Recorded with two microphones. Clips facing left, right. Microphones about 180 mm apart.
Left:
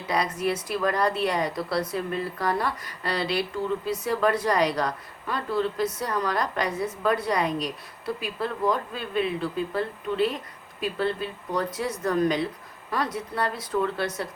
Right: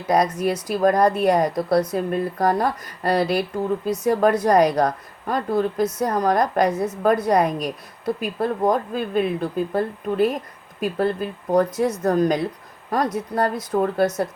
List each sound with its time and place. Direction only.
0.1 s speech: 40° right (ahead or behind)